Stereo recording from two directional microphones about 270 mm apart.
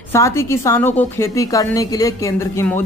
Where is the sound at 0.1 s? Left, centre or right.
Centre.